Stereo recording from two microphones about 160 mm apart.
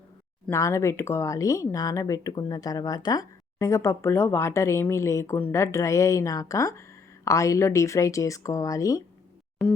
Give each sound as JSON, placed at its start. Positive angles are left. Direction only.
{"t": 0.5, "sound": "speech", "side_deg": 15}